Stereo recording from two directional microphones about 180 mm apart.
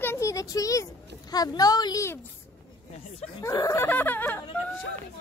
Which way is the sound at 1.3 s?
20° left (ahead or behind).